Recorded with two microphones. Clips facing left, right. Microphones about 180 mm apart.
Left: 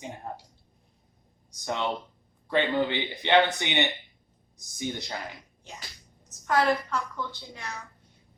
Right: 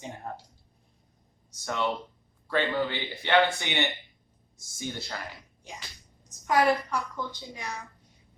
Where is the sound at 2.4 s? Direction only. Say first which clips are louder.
Left 2 dB; 20° left (ahead or behind).